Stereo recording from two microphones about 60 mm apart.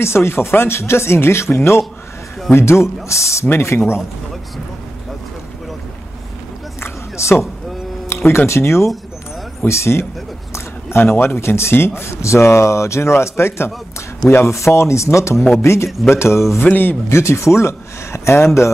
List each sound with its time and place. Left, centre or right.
0.0 s a man's voice: left
3.4 s a man's voice: left
6.8 s a sound: left
8.1 s a man's voice: left
15.3 s speech: centre
15.6 s a man's voice: left
16.6 s speech: left
17.1 s a man's voice: left